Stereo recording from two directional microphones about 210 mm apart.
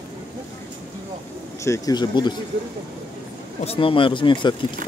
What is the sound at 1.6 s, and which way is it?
Speech, 15° left (ahead or behind).